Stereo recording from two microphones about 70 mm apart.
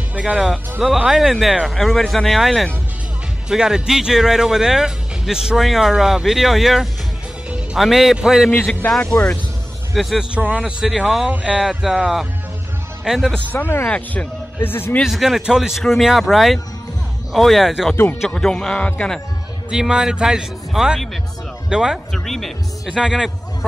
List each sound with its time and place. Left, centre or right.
0.4 s a man's voice: centre
8.8 s speech: left
9.9 s speech: centre
10.3 s a man's voice: right
10.6 s speech: centre
11.2 s speech: centre
13.5 s speech: left
13.8 s speech: centre
14.6 s speech: left
15.0 s speech: centre
18.8 s speech: left
19.7 s speech: centre
22.1 s speech: centre
22.8 s speech: centre